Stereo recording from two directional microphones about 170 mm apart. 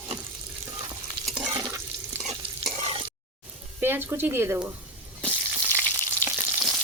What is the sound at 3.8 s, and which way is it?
Speech, 10° right (ahead or behind).